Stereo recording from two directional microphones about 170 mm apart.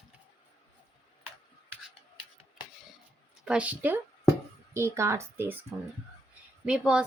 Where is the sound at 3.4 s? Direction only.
5° right (ahead or behind).